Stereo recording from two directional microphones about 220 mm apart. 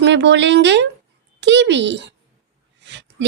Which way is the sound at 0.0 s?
55° right (ahead or behind).